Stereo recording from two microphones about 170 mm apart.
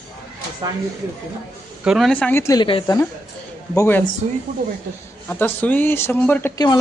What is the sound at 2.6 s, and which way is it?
Speech, 30° left (ahead or behind).